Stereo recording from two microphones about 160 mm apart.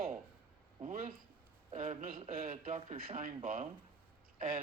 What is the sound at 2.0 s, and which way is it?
Speech, 35° right (ahead or behind).